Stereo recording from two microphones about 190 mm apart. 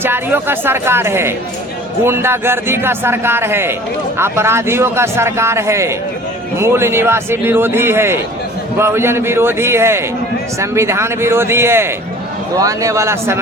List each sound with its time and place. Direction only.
0.0 s a man's voice: 10° right (ahead or behind)